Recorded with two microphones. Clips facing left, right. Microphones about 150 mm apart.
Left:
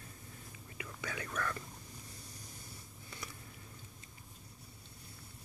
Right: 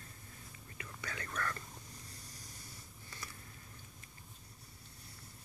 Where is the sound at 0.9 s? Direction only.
10° left (ahead or behind).